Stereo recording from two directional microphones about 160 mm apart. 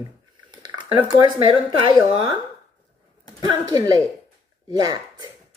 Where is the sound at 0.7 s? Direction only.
30° right (ahead or behind).